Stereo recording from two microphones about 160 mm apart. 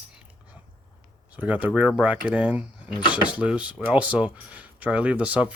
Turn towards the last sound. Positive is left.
turn(degrees=-10)  # may be behind; listen again after turning